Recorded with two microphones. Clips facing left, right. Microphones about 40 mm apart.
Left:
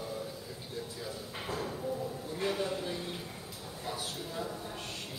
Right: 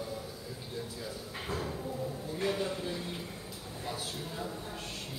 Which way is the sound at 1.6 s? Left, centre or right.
Centre.